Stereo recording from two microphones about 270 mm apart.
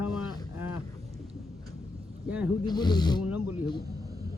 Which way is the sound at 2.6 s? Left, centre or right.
Centre.